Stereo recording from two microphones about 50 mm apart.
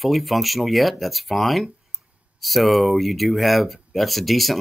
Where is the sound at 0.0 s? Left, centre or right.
Centre.